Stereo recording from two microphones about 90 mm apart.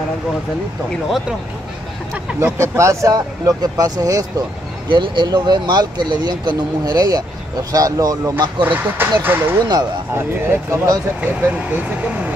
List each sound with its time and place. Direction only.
2.4 s speech: 25° right (ahead or behind)
4.8 s speech: 65° right (ahead or behind); by 8.5 s 40° right (ahead or behind)
8.6 s speech: 20° right (ahead or behind)
11.1 s speech: 20° right (ahead or behind)